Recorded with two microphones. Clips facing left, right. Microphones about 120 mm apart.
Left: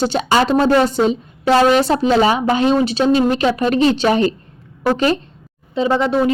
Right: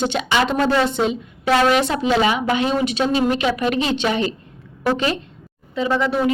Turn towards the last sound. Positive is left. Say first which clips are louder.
# left 3 dB
turn(degrees=25)  # may be behind; listen again after turning